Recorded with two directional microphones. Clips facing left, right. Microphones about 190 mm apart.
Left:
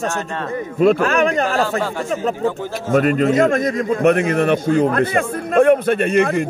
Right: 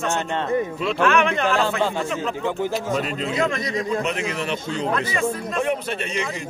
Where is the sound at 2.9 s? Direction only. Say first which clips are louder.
Left 9 dB; 55° left (ahead or behind).